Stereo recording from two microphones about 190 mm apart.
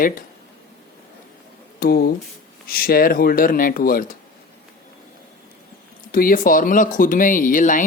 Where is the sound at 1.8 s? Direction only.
50° left (ahead or behind).